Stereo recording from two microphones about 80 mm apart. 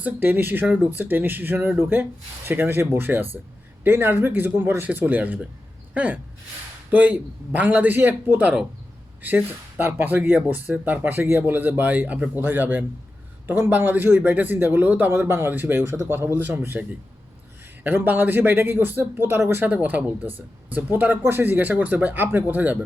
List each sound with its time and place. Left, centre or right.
0.0 s speech: right
15.8 s speech: right
17.8 s speech: right